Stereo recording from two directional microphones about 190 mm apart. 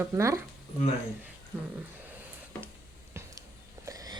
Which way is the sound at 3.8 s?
20° right (ahead or behind).